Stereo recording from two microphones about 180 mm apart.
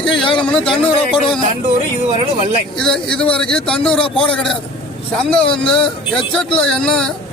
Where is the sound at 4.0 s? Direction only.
30° left (ahead or behind).